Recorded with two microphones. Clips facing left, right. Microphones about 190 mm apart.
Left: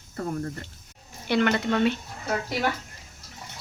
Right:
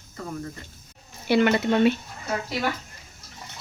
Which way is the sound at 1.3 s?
10° right (ahead or behind).